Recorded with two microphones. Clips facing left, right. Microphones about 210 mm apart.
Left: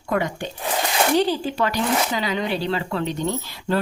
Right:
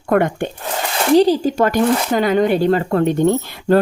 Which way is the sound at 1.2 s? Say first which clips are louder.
Right 8 dB; 40° right (ahead or behind).